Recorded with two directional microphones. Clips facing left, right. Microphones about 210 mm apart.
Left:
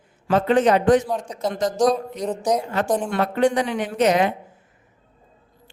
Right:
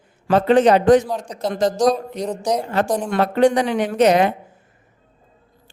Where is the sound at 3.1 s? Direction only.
35° right (ahead or behind).